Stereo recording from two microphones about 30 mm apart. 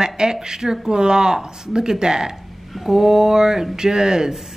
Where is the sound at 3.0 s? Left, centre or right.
Centre.